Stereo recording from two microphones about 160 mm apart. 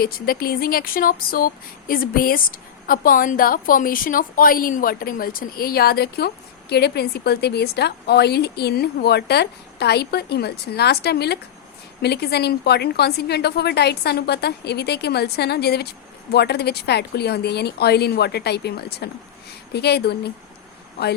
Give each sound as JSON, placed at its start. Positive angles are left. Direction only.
{"t": 0.0, "sound": "a woman's voice", "side_deg": 70}